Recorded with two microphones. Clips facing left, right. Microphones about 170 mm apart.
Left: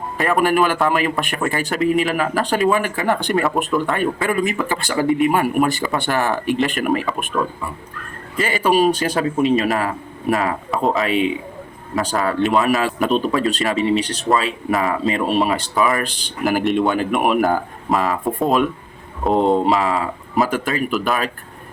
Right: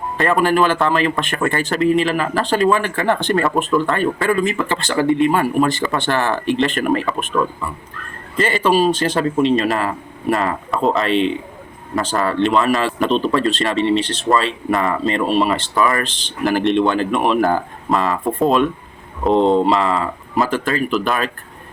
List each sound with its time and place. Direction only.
0.2 s a man's voice: 10° left (ahead or behind)
8.4 s a man's voice: 5° left (ahead or behind)
20.5 s a man's voice: 15° left (ahead or behind)
20.9 s speech: 5° left (ahead or behind)